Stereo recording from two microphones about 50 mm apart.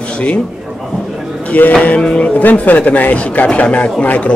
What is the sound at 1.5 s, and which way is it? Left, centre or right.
Speech, left.